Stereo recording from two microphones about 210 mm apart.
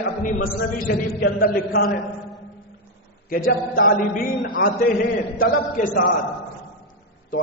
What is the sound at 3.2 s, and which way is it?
A man's voice, 40° left (ahead or behind).